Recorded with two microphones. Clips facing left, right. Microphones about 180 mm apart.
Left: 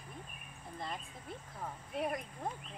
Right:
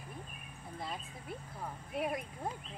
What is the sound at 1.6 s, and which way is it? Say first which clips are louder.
Speech: even; centre (ahead or behind).